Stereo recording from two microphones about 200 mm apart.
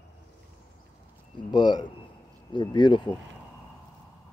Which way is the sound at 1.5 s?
20° left (ahead or behind).